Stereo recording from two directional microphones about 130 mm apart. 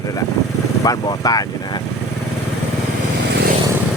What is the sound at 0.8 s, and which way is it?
Speech, 30° left (ahead or behind).